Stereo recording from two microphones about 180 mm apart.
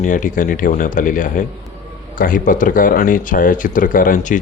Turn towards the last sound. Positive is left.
turn(degrees=45)  # may be behind; listen again after turning